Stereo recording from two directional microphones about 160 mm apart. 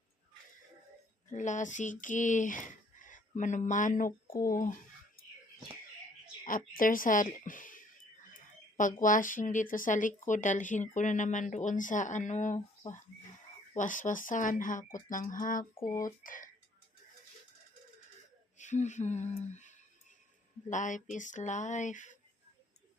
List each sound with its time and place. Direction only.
1.3 s speech: 50° left (ahead or behind)
6.4 s speech: 60° left (ahead or behind)
15.9 s speech: 20° left (ahead or behind)
16.2 s speech: 55° left (ahead or behind)
18.5 s speech: 50° left (ahead or behind)